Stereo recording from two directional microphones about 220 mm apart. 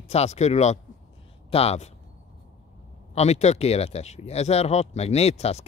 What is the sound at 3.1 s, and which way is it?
Speech, 30° left (ahead or behind).